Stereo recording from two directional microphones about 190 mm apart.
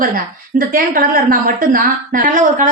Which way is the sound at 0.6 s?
45° right (ahead or behind).